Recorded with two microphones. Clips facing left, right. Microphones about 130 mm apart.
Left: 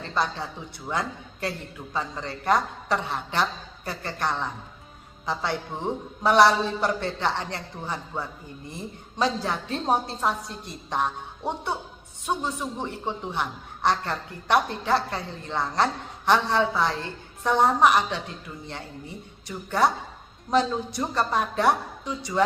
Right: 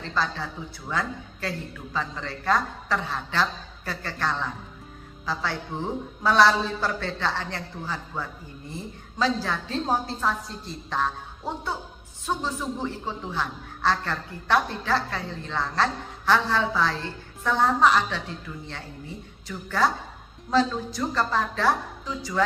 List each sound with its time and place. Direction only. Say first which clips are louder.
0.0 s a woman's voice: left 1 dB; 20° left (ahead or behind)